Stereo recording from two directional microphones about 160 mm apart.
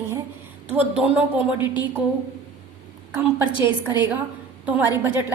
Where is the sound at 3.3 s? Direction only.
15° right (ahead or behind).